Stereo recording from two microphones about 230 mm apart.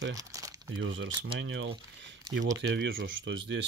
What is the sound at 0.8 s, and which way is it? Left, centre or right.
Speech, right.